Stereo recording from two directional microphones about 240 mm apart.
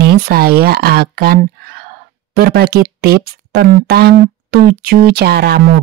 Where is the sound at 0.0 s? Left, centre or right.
Right.